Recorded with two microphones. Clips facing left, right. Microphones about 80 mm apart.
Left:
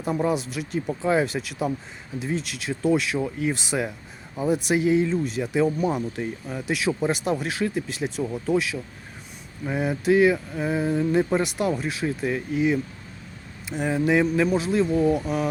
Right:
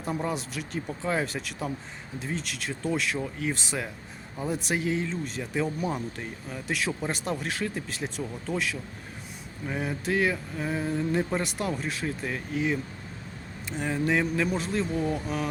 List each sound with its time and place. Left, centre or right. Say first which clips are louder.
0.0 s speech: left 6 dB; centre
8.2 s speech: left 10 dB; centre
8.5 s speech: left 3 dB; centre